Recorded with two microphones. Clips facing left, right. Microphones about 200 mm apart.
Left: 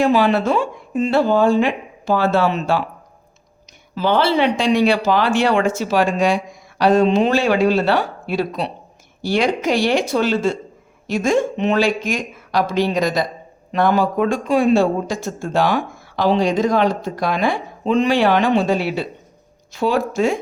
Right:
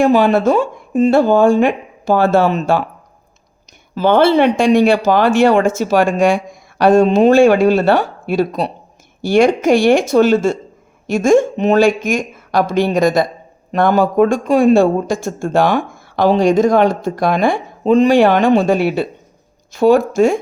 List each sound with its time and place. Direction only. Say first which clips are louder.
0.0 s a man's voice: right 4 dB; 45° right (ahead or behind)
3.9 s a man's voice: right 6 dB; 50° right (ahead or behind)